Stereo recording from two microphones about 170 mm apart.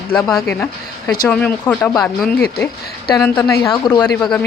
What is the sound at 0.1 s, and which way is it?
Speech, 15° left (ahead or behind).